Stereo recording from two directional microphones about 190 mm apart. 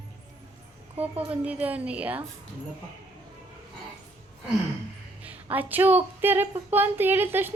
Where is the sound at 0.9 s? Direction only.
10° right (ahead or behind).